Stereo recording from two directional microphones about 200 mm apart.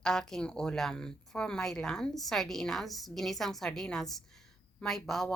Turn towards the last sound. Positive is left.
turn(degrees=0)  # may be behind; listen again after turning